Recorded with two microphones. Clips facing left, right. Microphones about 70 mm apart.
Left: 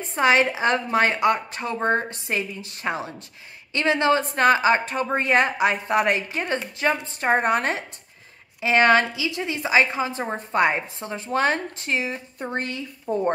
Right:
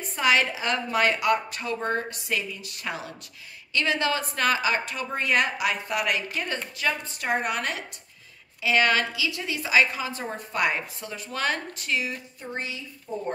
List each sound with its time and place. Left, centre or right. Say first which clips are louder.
0.0 s a woman's voice: left 4 dB; left
12.4 s speech: left 9 dB; left
13.1 s speech: left 8 dB; left